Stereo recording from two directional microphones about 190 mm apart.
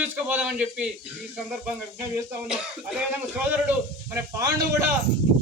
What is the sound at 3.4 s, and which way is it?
Speech, 10° right (ahead or behind).